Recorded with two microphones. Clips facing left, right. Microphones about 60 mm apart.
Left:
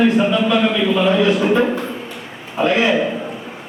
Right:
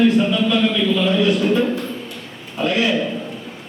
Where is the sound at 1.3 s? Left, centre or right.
Centre.